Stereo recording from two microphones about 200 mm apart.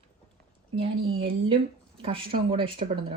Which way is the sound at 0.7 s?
25° right (ahead or behind).